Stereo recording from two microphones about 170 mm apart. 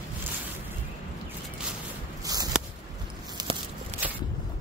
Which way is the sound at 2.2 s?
20° right (ahead or behind).